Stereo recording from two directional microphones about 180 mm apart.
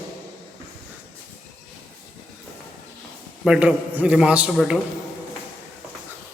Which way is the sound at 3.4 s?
5° right (ahead or behind).